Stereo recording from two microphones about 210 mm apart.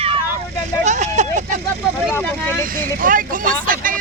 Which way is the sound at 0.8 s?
35° right (ahead or behind).